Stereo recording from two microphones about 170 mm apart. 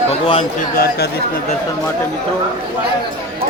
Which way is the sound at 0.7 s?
65° left (ahead or behind).